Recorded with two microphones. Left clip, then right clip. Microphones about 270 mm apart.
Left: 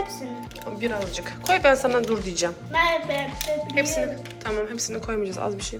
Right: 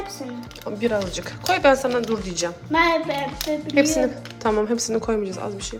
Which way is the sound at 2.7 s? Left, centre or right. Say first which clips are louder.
Right 3 dB; right.